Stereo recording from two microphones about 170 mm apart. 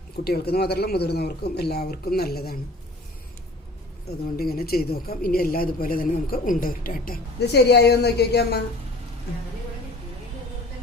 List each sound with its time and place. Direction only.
0.3 s speech: 70° left (ahead or behind)
4.4 s speech: 65° left (ahead or behind)